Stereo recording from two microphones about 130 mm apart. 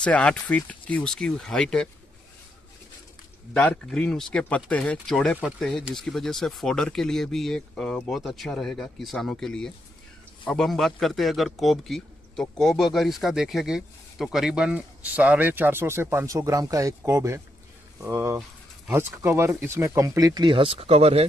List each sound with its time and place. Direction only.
0.0 s speech: 10° left (ahead or behind)
3.5 s speech: 10° left (ahead or behind); by 21.3 s 50° right (ahead or behind)